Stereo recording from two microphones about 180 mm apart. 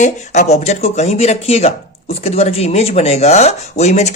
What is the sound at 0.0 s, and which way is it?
Speech, 40° left (ahead or behind).